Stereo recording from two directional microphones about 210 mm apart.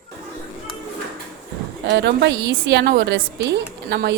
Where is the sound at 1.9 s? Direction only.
55° right (ahead or behind).